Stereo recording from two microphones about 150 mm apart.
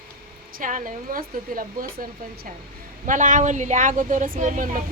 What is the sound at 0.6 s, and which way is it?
Speech, 60° right (ahead or behind).